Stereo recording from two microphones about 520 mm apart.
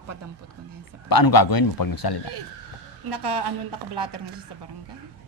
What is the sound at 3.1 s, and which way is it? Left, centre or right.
A woman's voice, right.